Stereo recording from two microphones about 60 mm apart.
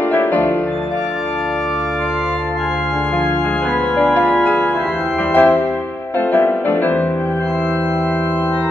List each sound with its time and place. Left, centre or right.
0.1 s music: left
4.0 s music: left